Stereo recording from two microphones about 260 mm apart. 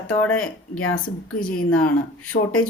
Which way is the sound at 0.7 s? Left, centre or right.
Left.